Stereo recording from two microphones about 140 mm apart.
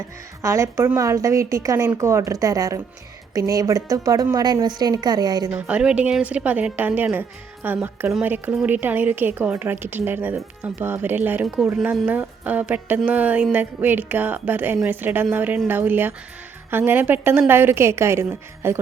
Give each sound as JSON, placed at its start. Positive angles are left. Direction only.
{"t": 0.4, "sound": "a woman's voice", "side_deg": -20}
{"t": 5.5, "sound": "a woman's voice", "side_deg": -10}